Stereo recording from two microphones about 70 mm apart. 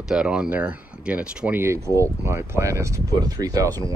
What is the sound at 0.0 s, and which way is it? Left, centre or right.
Speech, centre.